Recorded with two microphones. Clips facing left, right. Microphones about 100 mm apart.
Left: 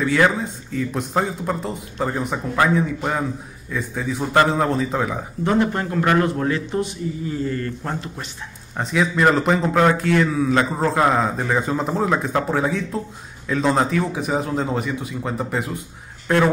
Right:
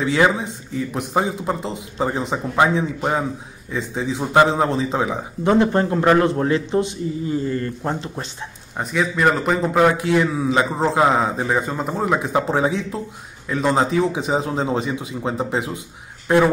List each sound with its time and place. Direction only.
0.0 s a man's voice: 15° right (ahead or behind)
5.7 s a man's voice: 30° right (ahead or behind)
8.9 s a man's voice: centre (ahead or behind)
12.1 s a man's voice: 10° right (ahead or behind)